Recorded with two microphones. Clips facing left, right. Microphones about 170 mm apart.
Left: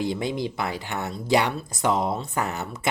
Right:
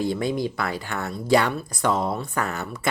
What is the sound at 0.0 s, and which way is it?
Speech, 20° left (ahead or behind).